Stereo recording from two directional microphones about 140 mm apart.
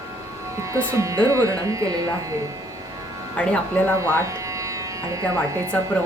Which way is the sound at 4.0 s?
20° right (ahead or behind).